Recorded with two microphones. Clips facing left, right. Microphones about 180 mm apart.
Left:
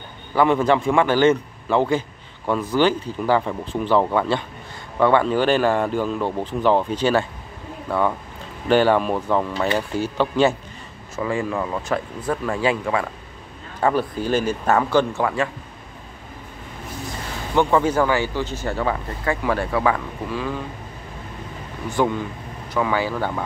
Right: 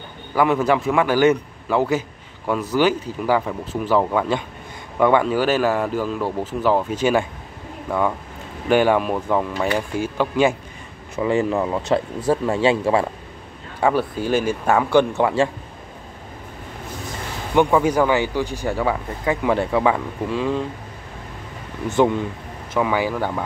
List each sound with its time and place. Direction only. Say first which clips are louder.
0.3 s a man's voice: left 1 dB; 5° right (ahead or behind)
8.6 s a man's voice: even; 10° right (ahead or behind)
11.2 s speech: right 5 dB; 25° right (ahead or behind)
13.7 s a man's voice: right 1 dB; 10° right (ahead or behind)
17.6 s a man's voice: right 2 dB; 10° right (ahead or behind)
21.8 s a man's voice: right 4 dB; 20° right (ahead or behind)